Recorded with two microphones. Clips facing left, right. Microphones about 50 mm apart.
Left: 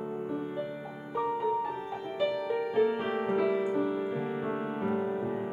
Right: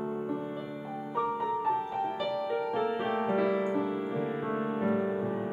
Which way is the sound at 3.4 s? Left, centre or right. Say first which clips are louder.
Left 2 dB; centre.